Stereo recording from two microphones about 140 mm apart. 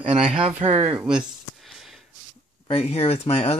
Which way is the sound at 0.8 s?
10° right (ahead or behind).